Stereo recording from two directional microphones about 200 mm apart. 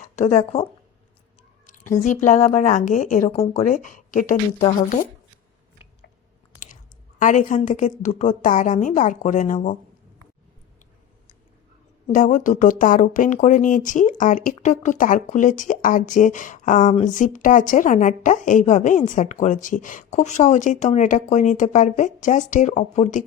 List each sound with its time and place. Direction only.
0.0 s speech: 35° left (ahead or behind)
2.0 s speech: 35° left (ahead or behind)
7.2 s speech: 40° left (ahead or behind)
12.0 s speech: 40° left (ahead or behind)